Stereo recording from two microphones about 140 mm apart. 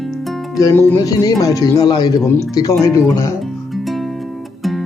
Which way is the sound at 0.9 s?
25° left (ahead or behind).